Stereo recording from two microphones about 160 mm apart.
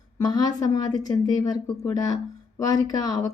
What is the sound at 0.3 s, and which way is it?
Speech, 25° left (ahead or behind).